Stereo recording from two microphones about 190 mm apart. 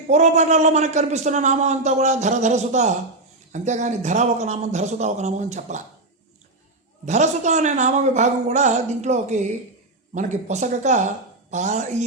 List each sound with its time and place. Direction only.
0.1 s a man's voice: 40° right (ahead or behind)
7.0 s a man's voice: 40° right (ahead or behind)